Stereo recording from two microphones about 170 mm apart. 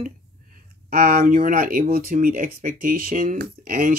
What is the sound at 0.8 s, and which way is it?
Speech, 65° right (ahead or behind).